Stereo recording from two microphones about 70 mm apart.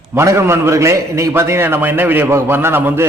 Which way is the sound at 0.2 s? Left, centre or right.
Right.